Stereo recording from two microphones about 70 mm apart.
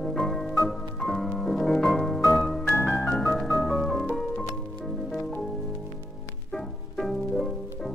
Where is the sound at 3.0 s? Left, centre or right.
Centre.